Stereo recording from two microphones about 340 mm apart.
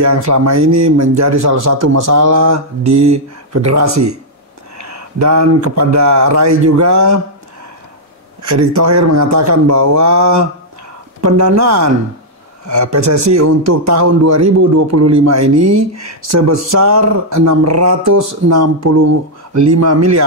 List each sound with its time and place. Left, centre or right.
0.4 s a man's voice: right
8.4 s a man's voice: right